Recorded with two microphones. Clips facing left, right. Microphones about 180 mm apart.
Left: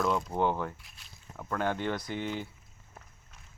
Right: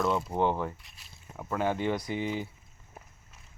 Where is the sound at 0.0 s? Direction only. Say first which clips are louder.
Right 1 dB; 5° right (ahead or behind).